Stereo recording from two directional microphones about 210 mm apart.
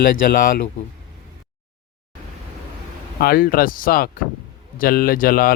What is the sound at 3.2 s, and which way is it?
Speech, 45° left (ahead or behind).